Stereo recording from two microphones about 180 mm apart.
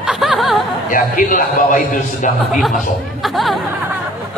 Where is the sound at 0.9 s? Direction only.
50° left (ahead or behind).